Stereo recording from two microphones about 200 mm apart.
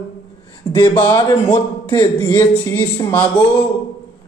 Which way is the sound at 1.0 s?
15° left (ahead or behind).